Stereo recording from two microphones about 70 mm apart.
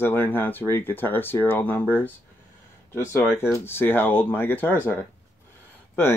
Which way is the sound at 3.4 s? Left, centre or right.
Left.